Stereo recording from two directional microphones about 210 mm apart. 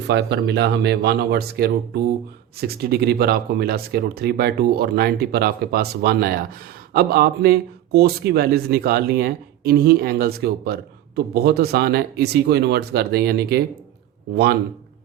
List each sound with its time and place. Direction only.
0.1 s speech: 55° right (ahead or behind)